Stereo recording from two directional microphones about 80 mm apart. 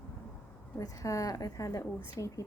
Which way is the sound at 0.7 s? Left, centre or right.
Left.